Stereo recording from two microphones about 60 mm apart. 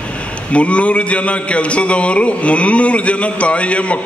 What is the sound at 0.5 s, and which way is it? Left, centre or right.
A man's voice, left.